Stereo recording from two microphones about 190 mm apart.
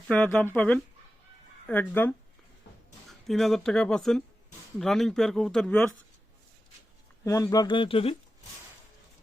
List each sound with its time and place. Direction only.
0.1 s speech: 10° left (ahead or behind)
7.3 s speech: 15° left (ahead or behind)